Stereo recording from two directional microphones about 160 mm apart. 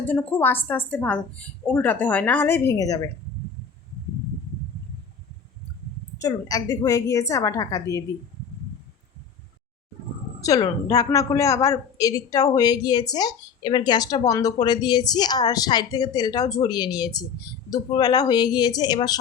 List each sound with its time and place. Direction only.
0.0 s a woman's voice: 10° left (ahead or behind)
6.2 s a woman's voice: 20° left (ahead or behind)
10.4 s a woman's voice: 25° left (ahead or behind)